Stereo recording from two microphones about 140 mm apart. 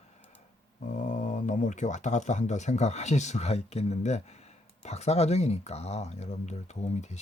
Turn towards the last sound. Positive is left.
turn(degrees=55)  # may be behind; listen again after turning